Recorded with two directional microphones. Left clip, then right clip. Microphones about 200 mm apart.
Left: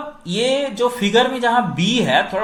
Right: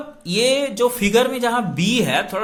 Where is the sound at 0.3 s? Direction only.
25° right (ahead or behind).